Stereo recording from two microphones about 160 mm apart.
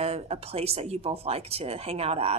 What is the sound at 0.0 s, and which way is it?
A woman's voice, 40° right (ahead or behind).